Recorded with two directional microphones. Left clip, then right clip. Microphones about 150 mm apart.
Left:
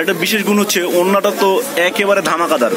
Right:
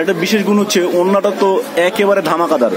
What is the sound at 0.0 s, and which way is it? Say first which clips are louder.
Speech: right 1 dB; 10° right (ahead or behind).